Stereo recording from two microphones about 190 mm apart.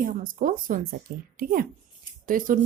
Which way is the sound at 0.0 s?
45° right (ahead or behind).